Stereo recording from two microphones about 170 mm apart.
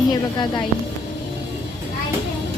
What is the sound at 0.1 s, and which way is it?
Speech, 25° left (ahead or behind).